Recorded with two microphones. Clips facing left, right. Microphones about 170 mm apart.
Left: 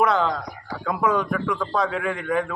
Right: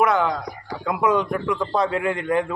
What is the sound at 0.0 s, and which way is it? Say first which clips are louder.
Speech: right 1 dB; 10° right (ahead or behind).